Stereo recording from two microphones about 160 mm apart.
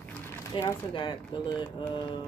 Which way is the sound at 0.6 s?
30° left (ahead or behind).